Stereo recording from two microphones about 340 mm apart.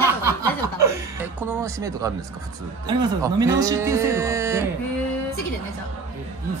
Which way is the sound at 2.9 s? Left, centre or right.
Centre.